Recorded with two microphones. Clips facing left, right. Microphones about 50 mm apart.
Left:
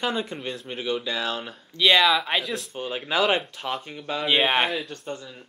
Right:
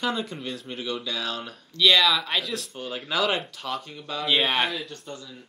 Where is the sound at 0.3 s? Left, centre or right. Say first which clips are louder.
Left 2 dB; left.